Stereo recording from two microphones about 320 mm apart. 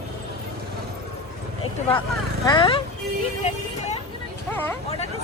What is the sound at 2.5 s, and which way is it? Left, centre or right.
Speech, centre.